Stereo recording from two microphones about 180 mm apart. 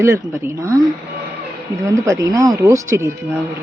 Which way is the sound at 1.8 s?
15° right (ahead or behind).